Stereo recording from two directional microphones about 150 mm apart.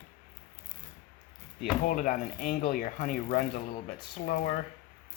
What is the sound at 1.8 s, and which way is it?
Speech, 60° left (ahead or behind).